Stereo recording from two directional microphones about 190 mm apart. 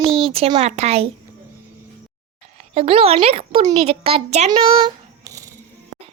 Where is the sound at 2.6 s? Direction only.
30° right (ahead or behind).